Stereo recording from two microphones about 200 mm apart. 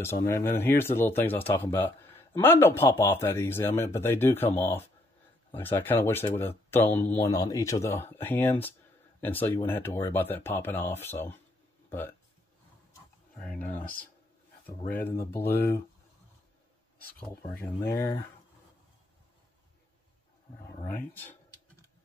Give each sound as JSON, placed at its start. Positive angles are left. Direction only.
{"t": 0.0, "sound": "speech", "side_deg": 15}
{"t": 13.4, "sound": "speech", "side_deg": 10}
{"t": 14.9, "sound": "speech", "side_deg": 10}
{"t": 17.6, "sound": "speech", "side_deg": 15}
{"t": 20.8, "sound": "speech", "side_deg": 10}